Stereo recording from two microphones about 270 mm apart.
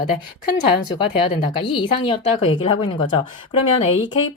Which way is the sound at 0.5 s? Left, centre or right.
Centre.